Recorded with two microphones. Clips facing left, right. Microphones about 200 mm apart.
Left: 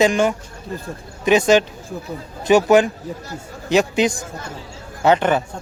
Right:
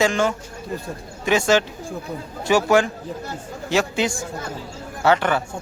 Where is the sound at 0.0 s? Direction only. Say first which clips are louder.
Left 3 dB; 15° left (ahead or behind).